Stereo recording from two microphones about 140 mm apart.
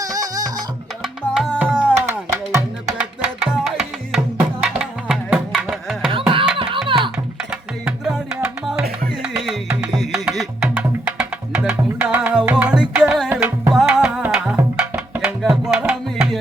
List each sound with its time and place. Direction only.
0.0 s music: 25° right (ahead or behind)
1.0 s music: 10° right (ahead or behind)
3.0 s music: 5° right (ahead or behind)
6.1 s music: 40° right (ahead or behind)
7.5 s music: 5° right (ahead or behind)
15.2 s music: 5° right (ahead or behind)